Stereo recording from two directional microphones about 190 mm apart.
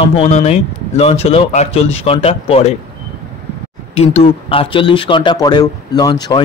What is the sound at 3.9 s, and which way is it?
Speech, 30° left (ahead or behind).